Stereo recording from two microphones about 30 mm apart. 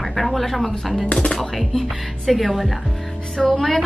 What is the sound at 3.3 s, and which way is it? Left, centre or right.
Speech, left.